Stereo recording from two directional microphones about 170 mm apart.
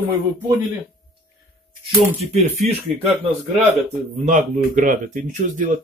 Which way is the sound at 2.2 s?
40° right (ahead or behind).